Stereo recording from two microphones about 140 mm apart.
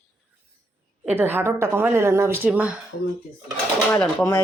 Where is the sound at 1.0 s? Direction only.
15° right (ahead or behind).